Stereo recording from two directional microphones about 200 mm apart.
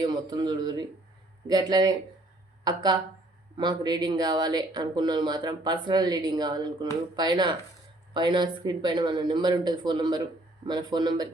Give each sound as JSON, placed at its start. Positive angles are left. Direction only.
{"t": 0.0, "sound": "speech", "side_deg": -20}